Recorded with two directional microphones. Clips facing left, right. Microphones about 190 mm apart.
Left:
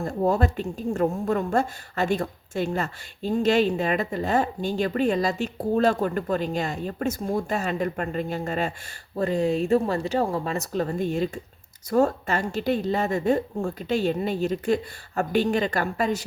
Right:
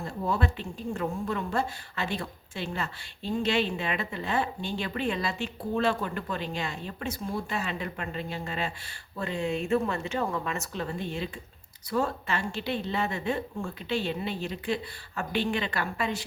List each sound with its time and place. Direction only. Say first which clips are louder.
0.0 s speech: left 7 dB; 45° left (ahead or behind)